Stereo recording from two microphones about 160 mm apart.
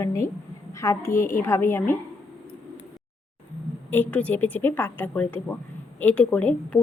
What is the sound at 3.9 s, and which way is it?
A woman's voice, 10° left (ahead or behind).